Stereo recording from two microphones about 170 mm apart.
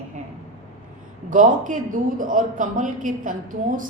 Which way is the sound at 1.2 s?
50° right (ahead or behind).